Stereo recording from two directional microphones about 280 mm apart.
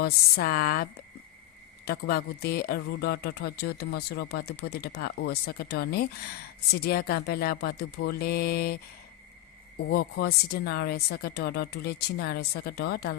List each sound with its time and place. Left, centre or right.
0.0 s speech: left
9.9 s speech: left